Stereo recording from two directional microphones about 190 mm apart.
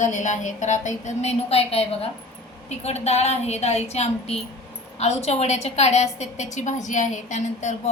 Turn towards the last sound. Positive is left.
turn(degrees=40)  # may be behind; listen again after turning